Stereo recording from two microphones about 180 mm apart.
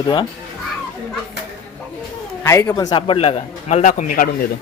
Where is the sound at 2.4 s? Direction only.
20° left (ahead or behind); by 4.2 s 45° left (ahead or behind).